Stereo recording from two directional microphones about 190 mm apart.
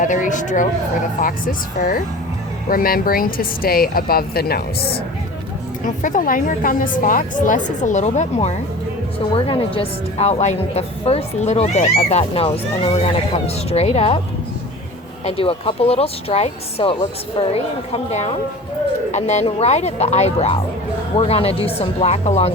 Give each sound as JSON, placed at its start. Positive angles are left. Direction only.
{"t": 0.0, "sound": "a woman's voice", "side_deg": 40}
{"t": 5.8, "sound": "a woman's voice", "side_deg": 45}
{"t": 15.2, "sound": "a woman's voice", "side_deg": 30}